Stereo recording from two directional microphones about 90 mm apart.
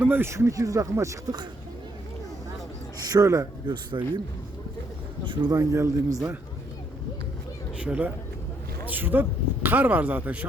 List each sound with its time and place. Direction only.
0.0 s speech: 25° right (ahead or behind)
3.0 s speech: 45° right (ahead or behind)
3.7 s speech: 60° right (ahead or behind)
5.2 s speech: 60° right (ahead or behind)
5.5 s speech: 35° right (ahead or behind)
7.8 s speech: 15° right (ahead or behind)